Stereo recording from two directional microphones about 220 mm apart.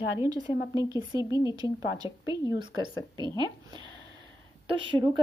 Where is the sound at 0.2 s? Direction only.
15° right (ahead or behind).